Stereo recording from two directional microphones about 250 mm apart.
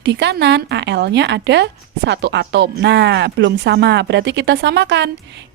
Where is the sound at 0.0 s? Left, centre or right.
Right.